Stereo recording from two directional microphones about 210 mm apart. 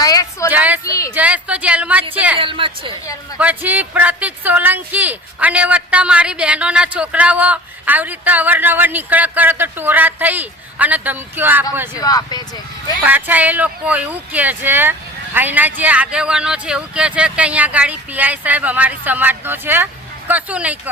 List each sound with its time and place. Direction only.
0.0 s speech: 15° left (ahead or behind)
0.5 s speech: 5° right (ahead or behind)
0.9 s speech: 15° left (ahead or behind)
1.1 s speech: 5° right (ahead or behind)
2.4 s a woman's voice: 25° right (ahead or behind)
3.3 s speech: 10° right (ahead or behind)
11.9 s speech: 20° left (ahead or behind)
13.0 s speech: 10° right (ahead or behind)